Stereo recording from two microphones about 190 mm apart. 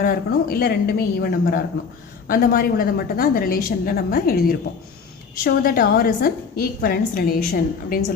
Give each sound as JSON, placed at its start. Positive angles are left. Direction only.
{"t": 0.0, "sound": "a woman's voice", "side_deg": 50}